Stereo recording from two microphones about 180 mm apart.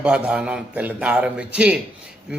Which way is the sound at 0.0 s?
5° right (ahead or behind).